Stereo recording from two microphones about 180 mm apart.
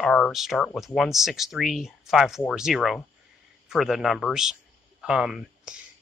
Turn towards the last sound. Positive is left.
turn(degrees=-5)  # may be behind; listen again after turning